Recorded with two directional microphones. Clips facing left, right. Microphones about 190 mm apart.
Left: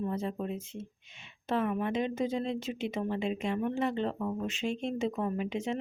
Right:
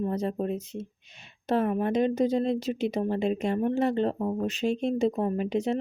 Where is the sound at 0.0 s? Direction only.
40° right (ahead or behind).